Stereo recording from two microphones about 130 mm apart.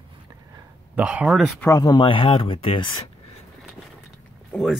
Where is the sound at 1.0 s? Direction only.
10° right (ahead or behind).